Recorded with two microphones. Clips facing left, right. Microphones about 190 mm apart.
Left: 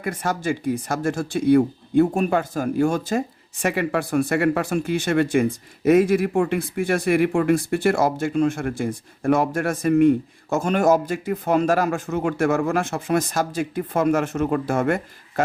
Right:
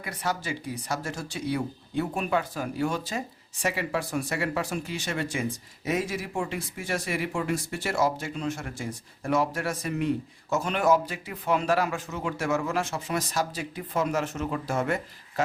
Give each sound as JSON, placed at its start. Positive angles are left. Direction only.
{"t": 0.0, "sound": "speech", "side_deg": 50}